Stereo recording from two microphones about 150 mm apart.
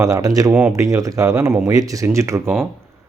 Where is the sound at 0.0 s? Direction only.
25° right (ahead or behind).